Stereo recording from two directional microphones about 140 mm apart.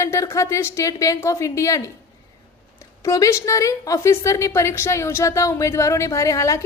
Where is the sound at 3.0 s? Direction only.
25° left (ahead or behind).